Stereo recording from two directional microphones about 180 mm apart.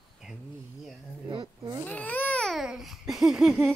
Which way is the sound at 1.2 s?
25° right (ahead or behind).